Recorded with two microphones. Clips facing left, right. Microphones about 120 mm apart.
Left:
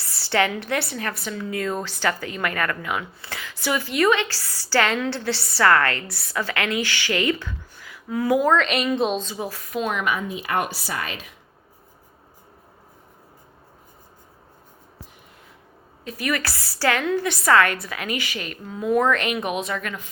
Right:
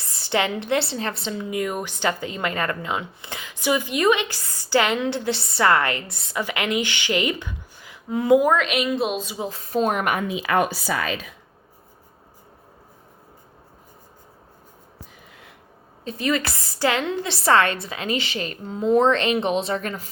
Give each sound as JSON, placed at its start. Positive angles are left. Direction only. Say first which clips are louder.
{"t": 0.0, "sound": "a woman's voice", "louder": "left 1 dB", "side_deg": -20}
{"t": 8.5, "sound": "a woman's voice", "louder": "left 1 dB", "side_deg": -5}
{"t": 9.4, "sound": "a woman's voice", "louder": "right 4 dB", "side_deg": -25}
{"t": 16.0, "sound": "a woman's voice", "louder": "right 3 dB", "side_deg": -25}